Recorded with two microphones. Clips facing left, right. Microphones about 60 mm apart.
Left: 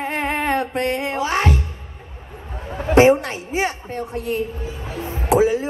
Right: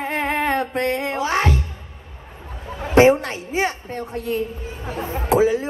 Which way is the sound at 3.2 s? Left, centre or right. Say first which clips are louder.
Even; right.